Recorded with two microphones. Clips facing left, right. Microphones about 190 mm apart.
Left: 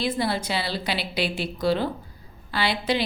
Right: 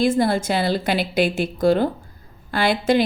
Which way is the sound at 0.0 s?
50° right (ahead or behind).